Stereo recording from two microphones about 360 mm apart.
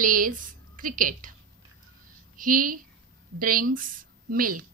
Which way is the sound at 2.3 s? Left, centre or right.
Right.